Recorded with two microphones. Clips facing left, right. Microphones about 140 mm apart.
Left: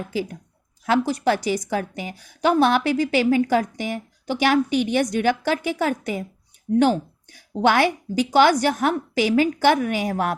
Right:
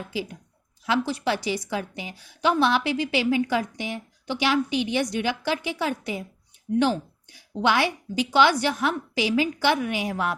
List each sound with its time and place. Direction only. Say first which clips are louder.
0.1 s a woman's voice: left 4 dB; 45° left (ahead or behind)